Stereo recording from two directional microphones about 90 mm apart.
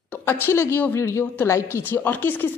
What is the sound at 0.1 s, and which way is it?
A woman's voice, 25° left (ahead or behind).